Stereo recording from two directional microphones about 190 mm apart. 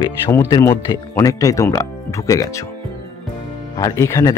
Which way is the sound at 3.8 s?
20° left (ahead or behind).